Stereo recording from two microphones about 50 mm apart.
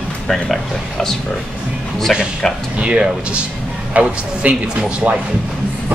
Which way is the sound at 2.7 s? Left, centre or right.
Right.